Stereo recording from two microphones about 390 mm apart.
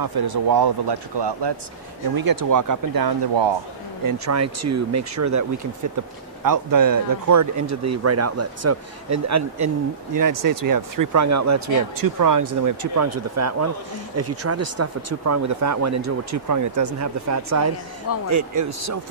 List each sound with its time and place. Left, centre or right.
0.0 s a man's voice: right
2.1 s speech: right
4.0 s speech: right
6.4 s speech: right
10.1 s speech: right